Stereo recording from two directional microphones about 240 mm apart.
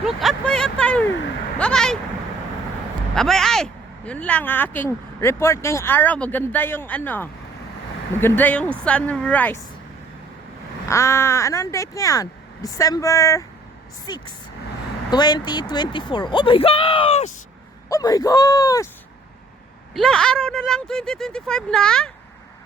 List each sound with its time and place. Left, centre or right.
0.0 s vehicle: centre
1.5 s speech: centre
3.2 s speech: centre
10.8 s speech: centre
17.8 s speech: centre
19.9 s speech: centre